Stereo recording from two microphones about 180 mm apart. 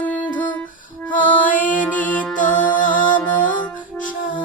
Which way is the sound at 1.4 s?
45° left (ahead or behind).